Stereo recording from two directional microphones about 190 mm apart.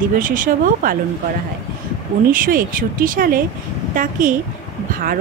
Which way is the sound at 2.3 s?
45° right (ahead or behind).